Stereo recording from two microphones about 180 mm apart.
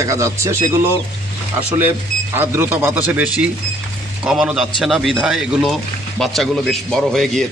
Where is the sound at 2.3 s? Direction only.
10° right (ahead or behind).